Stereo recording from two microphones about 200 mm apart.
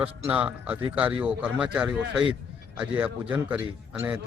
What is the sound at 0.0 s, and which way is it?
A man's voice, 5° right (ahead or behind).